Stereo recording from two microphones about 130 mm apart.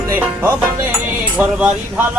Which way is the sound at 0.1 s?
15° right (ahead or behind).